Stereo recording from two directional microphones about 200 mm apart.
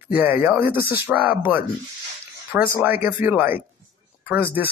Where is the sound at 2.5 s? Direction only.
10° right (ahead or behind).